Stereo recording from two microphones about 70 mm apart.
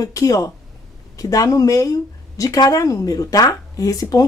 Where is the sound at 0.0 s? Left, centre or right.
Left.